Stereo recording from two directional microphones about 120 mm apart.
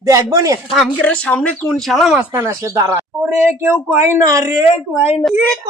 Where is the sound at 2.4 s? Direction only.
25° right (ahead or behind).